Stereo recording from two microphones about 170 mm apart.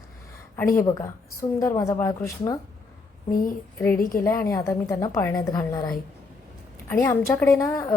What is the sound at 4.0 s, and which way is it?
Speech, 55° left (ahead or behind).